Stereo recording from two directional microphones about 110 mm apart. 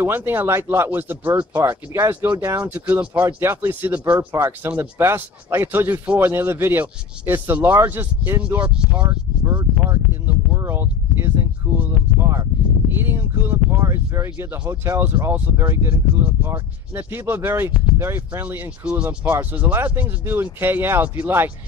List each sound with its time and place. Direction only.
0.0 s speech: 20° right (ahead or behind)
2.6 s speech: 15° right (ahead or behind)
9.8 s a sound: 20° right (ahead or behind)
12.9 s speech: 20° right (ahead or behind)
13.7 s speech: 30° right (ahead or behind)